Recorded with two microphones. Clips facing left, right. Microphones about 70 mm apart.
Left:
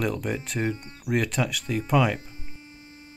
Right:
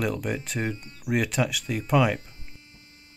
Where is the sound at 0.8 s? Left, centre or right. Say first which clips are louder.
Left 3 dB; left.